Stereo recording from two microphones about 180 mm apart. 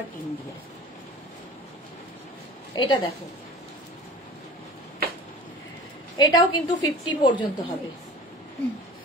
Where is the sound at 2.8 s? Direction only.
25° left (ahead or behind).